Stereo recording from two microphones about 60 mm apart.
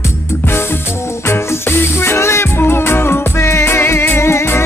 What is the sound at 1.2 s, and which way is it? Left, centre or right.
Music, left.